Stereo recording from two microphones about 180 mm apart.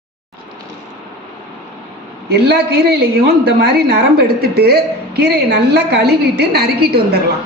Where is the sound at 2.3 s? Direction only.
65° right (ahead or behind).